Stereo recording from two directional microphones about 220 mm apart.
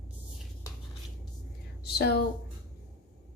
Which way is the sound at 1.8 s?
45° left (ahead or behind).